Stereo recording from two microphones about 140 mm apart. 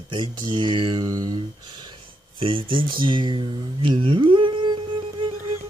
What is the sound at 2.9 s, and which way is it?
Humming, 35° right (ahead or behind).